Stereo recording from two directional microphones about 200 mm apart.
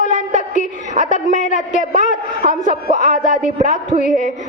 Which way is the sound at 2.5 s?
40° left (ahead or behind).